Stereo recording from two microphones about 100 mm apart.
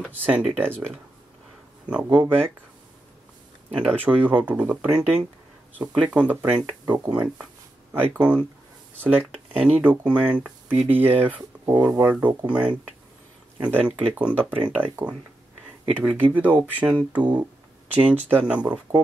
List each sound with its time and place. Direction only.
0.1 s speech: 15° right (ahead or behind)
3.7 s speech: 15° right (ahead or behind)